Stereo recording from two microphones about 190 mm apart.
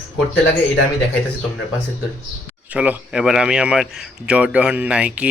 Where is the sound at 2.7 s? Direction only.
5° right (ahead or behind).